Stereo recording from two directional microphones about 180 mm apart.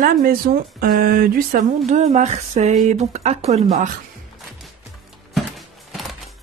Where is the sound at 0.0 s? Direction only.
55° right (ahead or behind).